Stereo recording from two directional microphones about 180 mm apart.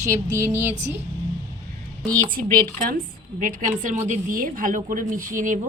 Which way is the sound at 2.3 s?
50° right (ahead or behind).